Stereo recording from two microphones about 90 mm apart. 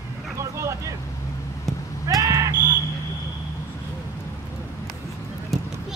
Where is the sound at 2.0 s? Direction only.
35° right (ahead or behind).